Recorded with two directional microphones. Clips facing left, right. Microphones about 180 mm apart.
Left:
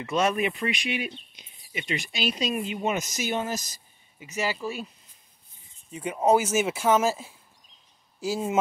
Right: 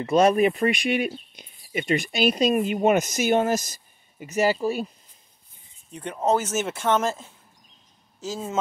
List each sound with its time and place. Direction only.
0.0 s speech: 35° right (ahead or behind)
5.9 s speech: 5° left (ahead or behind)